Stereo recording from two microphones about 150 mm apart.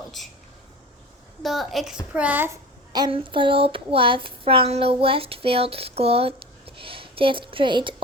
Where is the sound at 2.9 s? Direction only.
30° right (ahead or behind).